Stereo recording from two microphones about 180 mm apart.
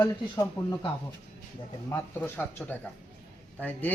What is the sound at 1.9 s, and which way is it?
Speech, 15° left (ahead or behind).